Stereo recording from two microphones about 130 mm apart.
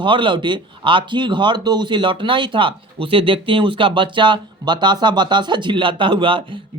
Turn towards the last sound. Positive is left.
turn(degrees=-40)  # may be behind; listen again after turning